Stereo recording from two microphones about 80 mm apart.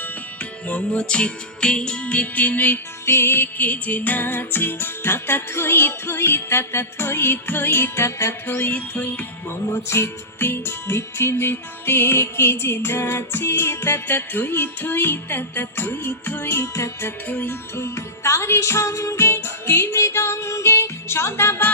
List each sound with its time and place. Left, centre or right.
0.7 s music: centre
3.1 s music: left
9.9 s music: left
17.2 s music: left
17.7 s music: left